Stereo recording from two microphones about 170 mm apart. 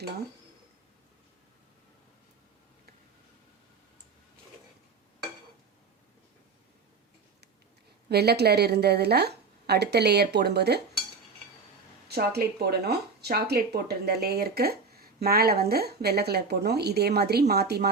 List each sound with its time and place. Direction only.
8.1 s speech: 70° right (ahead or behind)
12.0 s speech: 70° right (ahead or behind)